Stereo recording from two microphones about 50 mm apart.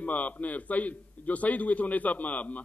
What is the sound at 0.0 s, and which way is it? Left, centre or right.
A man's voice, left.